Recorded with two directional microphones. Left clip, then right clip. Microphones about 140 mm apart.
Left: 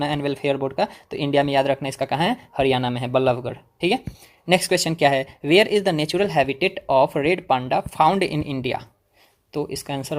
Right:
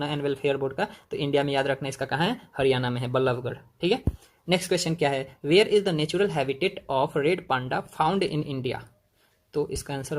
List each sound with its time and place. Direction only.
0.0 s speech: 30° left (ahead or behind)